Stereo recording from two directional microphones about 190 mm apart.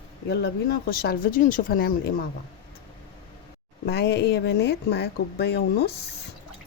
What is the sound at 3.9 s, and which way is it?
Speech, 60° left (ahead or behind).